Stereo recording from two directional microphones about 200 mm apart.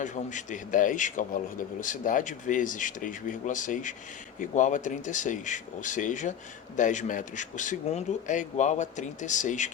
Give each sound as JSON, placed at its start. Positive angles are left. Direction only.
{"t": 0.0, "sound": "speech", "side_deg": 40}